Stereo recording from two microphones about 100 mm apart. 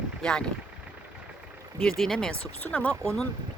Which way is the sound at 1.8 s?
5° left (ahead or behind).